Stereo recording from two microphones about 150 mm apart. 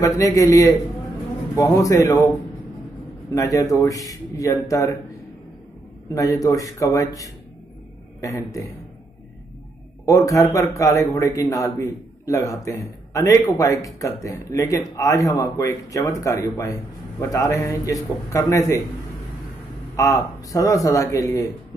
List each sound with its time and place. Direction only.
0.0 s a man's voice: 20° left (ahead or behind)
3.3 s a man's voice: 20° left (ahead or behind)
6.1 s a man's voice: 20° left (ahead or behind)
8.2 s a man's voice: 20° left (ahead or behind)
10.0 s a man's voice: 20° left (ahead or behind)
20.0 s a man's voice: 20° left (ahead or behind)